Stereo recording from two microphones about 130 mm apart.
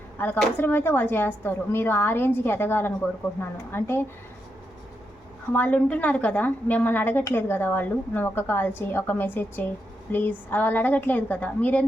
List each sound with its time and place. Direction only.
0.2 s a woman's voice: 15° left (ahead or behind)
5.5 s a woman's voice: 10° left (ahead or behind)